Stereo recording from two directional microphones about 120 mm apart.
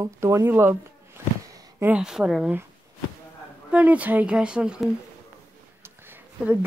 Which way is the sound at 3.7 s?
10° right (ahead or behind).